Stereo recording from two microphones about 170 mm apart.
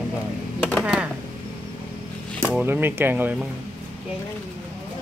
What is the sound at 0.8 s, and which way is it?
Speech, 5° right (ahead or behind).